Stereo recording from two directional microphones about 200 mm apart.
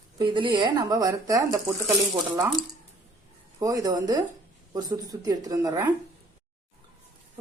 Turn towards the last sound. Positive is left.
turn(degrees=-15)  # may be behind; listen again after turning